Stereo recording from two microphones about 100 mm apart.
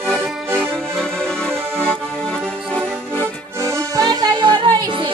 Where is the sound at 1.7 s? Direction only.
10° left (ahead or behind).